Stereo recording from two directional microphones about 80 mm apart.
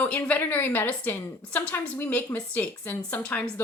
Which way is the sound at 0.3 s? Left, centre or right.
Left.